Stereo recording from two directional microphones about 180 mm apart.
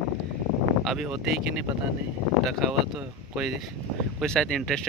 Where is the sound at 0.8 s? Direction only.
5° right (ahead or behind).